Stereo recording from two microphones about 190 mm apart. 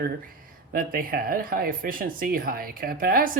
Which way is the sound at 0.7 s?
50° right (ahead or behind).